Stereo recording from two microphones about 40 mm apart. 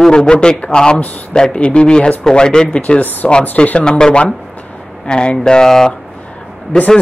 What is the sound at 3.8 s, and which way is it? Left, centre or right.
Speech, left.